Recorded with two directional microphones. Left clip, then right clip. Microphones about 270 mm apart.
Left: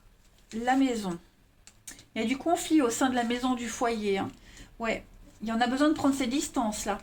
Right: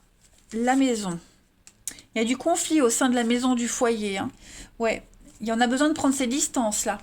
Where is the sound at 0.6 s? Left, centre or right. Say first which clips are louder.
Right 4 dB; right.